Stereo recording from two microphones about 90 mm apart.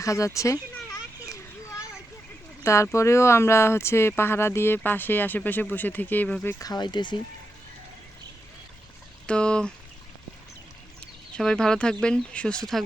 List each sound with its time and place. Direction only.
0.0 s children playing: 35° left (ahead or behind)
2.6 s speech: 35° left (ahead or behind)
6.6 s speech: 50° left (ahead or behind)
9.2 s speech: 10° left (ahead or behind)
11.0 s speech: 5° left (ahead or behind)